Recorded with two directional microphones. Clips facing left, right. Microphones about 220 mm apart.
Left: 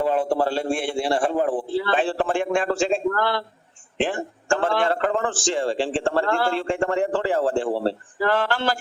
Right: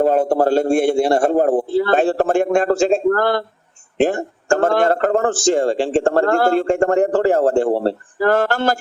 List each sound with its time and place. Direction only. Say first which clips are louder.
0.0 s speech: right 6 dB; 45° right (ahead or behind)